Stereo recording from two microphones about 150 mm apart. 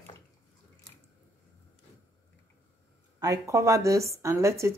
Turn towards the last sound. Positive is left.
turn(degrees=-20)  # may be behind; listen again after turning